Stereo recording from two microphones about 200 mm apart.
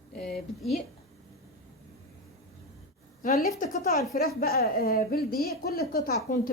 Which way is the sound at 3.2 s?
40° left (ahead or behind).